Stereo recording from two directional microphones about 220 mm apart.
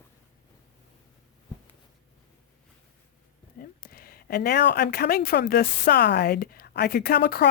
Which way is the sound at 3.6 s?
40° left (ahead or behind).